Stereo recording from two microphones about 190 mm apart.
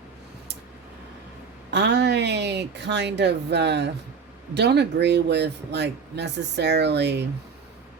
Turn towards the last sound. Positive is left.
turn(degrees=-65)  # may be behind; listen again after turning